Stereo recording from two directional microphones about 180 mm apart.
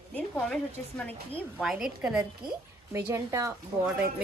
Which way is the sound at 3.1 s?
15° right (ahead or behind).